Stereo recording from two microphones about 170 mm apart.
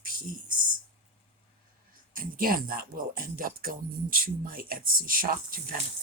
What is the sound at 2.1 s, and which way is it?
Speech, 55° right (ahead or behind).